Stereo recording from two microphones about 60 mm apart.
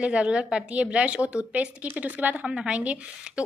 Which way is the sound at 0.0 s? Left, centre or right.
Centre.